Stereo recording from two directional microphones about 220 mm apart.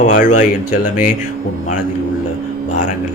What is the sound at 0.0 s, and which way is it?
Speech, 35° left (ahead or behind).